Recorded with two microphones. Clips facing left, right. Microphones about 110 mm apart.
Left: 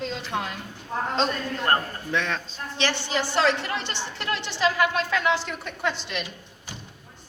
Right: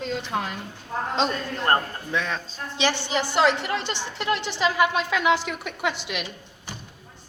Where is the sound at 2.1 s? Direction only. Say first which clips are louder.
Even; 5° right (ahead or behind).